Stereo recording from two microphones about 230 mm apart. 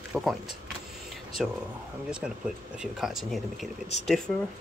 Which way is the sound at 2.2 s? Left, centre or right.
Centre.